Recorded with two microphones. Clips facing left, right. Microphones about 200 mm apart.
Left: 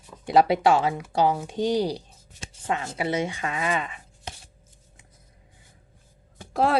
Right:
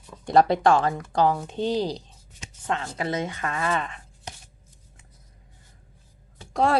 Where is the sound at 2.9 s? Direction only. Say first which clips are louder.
Left 2 dB; 10° left (ahead or behind).